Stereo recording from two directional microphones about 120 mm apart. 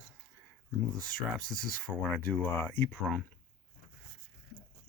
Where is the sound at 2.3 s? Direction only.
15° left (ahead or behind).